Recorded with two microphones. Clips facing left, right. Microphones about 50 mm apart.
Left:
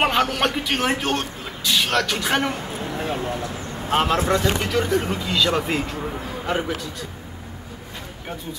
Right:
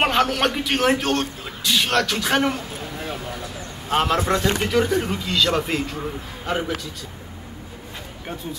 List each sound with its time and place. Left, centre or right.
0.0 s speech: centre
3.1 s speech: left
3.9 s speech: centre